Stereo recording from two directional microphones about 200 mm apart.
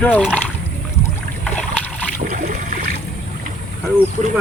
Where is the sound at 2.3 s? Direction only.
50° right (ahead or behind).